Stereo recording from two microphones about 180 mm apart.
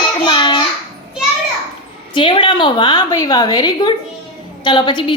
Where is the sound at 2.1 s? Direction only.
25° left (ahead or behind).